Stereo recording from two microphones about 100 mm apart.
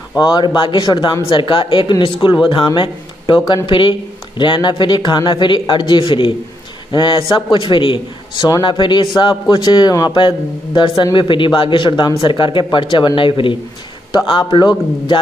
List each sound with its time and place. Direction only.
0.6 s speech: 55° left (ahead or behind)